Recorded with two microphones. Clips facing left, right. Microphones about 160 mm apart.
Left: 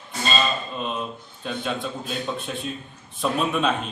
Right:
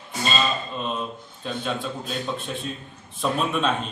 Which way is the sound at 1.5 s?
Centre (ahead or behind).